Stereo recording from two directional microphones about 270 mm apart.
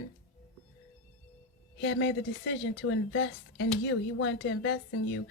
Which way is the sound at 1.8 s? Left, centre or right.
Left.